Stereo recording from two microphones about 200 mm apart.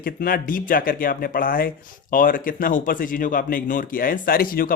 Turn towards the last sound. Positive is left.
turn(degrees=45)  # may be behind; listen again after turning